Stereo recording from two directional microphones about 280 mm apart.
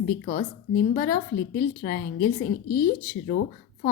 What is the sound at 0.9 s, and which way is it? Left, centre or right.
A woman's voice, left.